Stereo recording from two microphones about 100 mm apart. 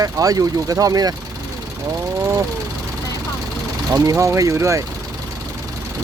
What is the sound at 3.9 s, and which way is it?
Speech, 35° right (ahead or behind).